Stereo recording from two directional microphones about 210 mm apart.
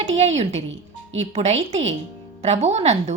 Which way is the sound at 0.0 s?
30° right (ahead or behind).